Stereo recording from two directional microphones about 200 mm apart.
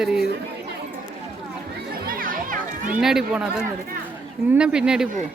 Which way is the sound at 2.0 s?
45° right (ahead or behind).